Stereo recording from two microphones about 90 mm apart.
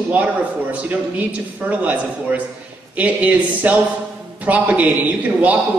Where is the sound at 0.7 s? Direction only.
15° right (ahead or behind).